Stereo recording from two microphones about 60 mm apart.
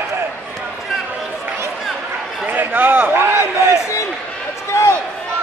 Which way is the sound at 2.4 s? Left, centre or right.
Right.